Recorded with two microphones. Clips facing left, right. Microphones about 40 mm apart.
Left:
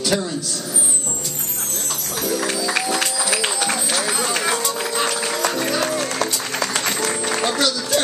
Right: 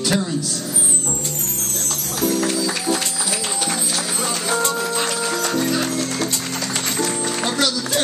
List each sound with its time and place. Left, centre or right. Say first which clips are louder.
0.1 s speech: even; centre
3.0 s music: left 4 dB; left
5.2 s music: right 1 dB; left